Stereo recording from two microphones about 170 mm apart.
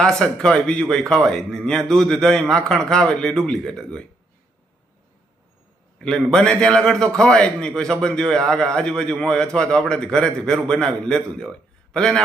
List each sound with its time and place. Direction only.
0.0 s a man's voice: 5° left (ahead or behind)
6.0 s a man's voice: 5° left (ahead or behind)